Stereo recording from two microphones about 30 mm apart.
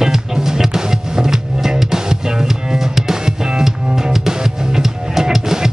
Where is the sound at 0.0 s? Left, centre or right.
Centre.